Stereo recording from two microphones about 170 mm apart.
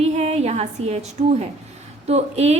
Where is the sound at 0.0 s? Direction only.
40° right (ahead or behind).